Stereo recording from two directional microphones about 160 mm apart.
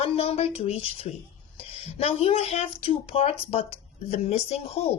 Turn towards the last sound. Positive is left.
turn(degrees=40)  # may be behind; listen again after turning